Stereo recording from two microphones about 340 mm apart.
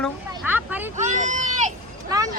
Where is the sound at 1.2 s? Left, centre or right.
Right.